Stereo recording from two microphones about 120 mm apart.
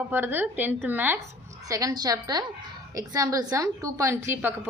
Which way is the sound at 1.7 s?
30° right (ahead or behind).